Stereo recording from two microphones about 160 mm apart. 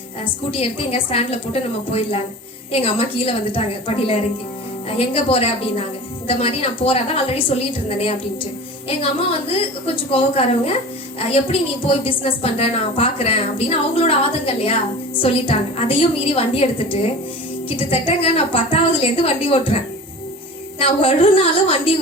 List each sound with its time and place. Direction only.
0.5 s a woman's voice: 35° left (ahead or behind)
9.8 s a woman's voice: 35° left (ahead or behind)